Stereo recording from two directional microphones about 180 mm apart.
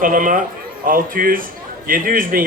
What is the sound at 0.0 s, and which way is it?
A man's voice, 50° right (ahead or behind).